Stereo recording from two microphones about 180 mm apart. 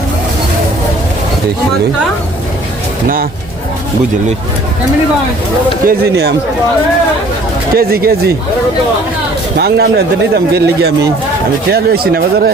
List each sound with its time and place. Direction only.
5.8 s speech: 60° right (ahead or behind)
7.8 s speech: 55° right (ahead or behind)
9.6 s speech: 65° right (ahead or behind)